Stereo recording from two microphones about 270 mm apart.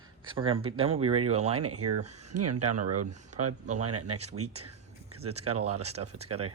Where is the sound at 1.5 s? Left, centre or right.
Right.